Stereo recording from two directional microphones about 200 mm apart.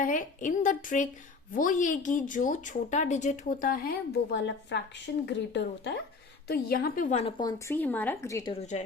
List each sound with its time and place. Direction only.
0.0 s a woman's voice: 40° left (ahead or behind); by 7.5 s 25° left (ahead or behind)
7.7 s speech: 10° left (ahead or behind)